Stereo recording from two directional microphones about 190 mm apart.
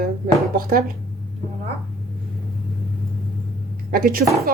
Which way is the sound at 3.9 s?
50° right (ahead or behind).